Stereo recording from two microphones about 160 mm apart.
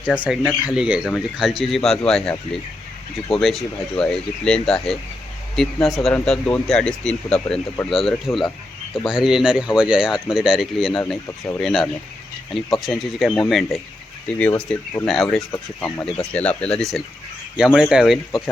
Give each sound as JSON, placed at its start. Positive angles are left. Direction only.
{"t": 0.2, "sound": "speech", "side_deg": -5}
{"t": 15.4, "sound": "speech", "side_deg": 15}